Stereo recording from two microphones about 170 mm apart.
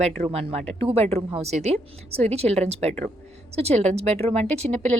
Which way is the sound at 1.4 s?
40° right (ahead or behind).